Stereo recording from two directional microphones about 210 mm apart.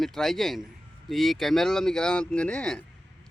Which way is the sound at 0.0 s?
Centre (ahead or behind).